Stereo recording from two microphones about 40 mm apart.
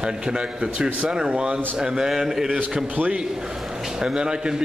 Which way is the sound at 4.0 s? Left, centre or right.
Centre.